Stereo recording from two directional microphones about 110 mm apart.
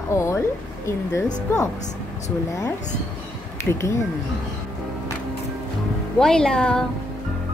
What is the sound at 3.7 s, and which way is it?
Speech, 25° left (ahead or behind).